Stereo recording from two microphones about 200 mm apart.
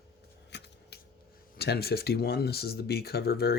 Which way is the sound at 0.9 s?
55° left (ahead or behind).